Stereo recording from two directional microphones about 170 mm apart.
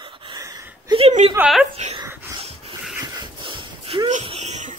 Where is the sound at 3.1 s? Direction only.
30° right (ahead or behind).